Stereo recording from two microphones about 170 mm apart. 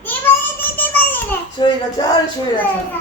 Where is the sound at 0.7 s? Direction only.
10° left (ahead or behind).